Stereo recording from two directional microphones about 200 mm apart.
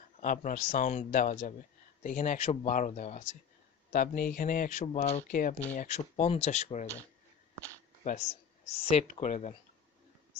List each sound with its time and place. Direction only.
0.2 s a man's voice: 40° left (ahead or behind)
8.0 s speech: 35° left (ahead or behind)